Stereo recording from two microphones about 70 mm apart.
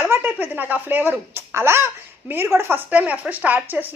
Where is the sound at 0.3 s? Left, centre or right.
Right.